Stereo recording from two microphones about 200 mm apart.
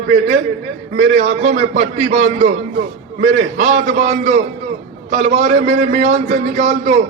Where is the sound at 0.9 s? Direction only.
35° right (ahead or behind).